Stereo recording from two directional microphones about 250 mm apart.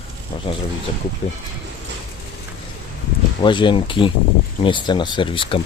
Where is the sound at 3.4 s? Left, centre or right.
Centre.